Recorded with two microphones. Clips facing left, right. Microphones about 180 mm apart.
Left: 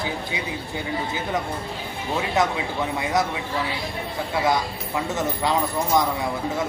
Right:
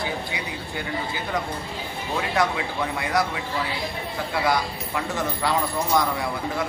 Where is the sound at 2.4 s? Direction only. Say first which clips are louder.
Left 1 dB; 20° left (ahead or behind).